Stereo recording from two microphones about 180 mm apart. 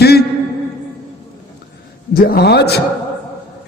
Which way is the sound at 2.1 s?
55° left (ahead or behind).